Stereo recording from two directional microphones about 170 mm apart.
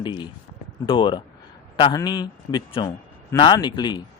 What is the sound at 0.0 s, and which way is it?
Speech, 25° left (ahead or behind).